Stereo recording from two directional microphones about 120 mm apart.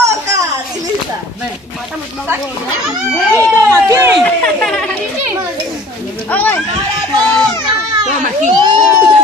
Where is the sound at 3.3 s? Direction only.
25° right (ahead or behind).